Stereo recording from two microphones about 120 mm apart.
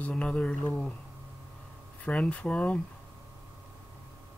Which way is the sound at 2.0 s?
10° left (ahead or behind).